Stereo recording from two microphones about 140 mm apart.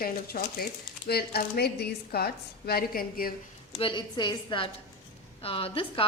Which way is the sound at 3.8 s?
35° left (ahead or behind).